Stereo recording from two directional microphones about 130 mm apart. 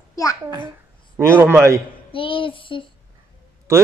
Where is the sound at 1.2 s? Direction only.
20° right (ahead or behind).